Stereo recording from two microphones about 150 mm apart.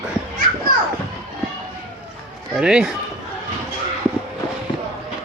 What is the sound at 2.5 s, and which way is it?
Speech, 5° right (ahead or behind).